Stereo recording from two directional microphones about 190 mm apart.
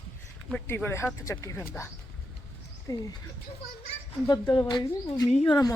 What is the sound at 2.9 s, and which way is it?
Speech, 20° left (ahead or behind).